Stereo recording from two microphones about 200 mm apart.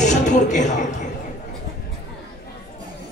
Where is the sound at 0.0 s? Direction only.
35° left (ahead or behind).